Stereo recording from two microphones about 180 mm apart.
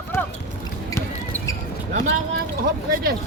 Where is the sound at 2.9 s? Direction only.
55° right (ahead or behind).